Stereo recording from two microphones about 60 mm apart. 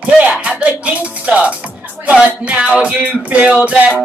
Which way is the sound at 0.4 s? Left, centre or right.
Right.